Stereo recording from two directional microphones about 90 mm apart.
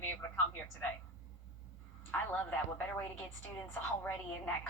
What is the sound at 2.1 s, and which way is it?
A man's voice, 20° left (ahead or behind).